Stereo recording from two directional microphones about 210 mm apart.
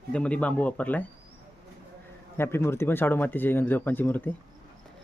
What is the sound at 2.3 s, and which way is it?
Speech, 10° left (ahead or behind).